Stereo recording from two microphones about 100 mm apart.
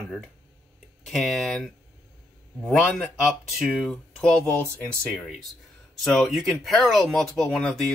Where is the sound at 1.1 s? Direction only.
Centre (ahead or behind).